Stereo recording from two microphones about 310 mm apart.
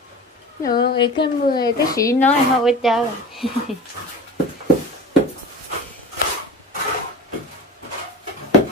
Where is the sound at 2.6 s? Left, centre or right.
Centre.